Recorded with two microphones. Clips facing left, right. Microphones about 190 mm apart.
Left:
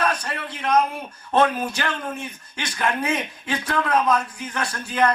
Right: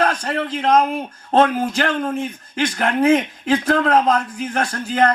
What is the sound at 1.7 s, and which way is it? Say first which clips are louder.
Speech: right 7 dB; 75° right (ahead or behind).